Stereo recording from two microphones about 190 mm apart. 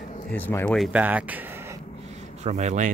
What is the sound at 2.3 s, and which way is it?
Speech, 35° right (ahead or behind).